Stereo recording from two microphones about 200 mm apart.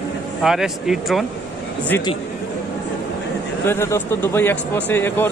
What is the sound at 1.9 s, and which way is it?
Speech, 20° left (ahead or behind).